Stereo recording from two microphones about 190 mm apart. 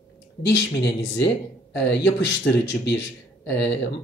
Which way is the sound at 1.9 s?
70° left (ahead or behind).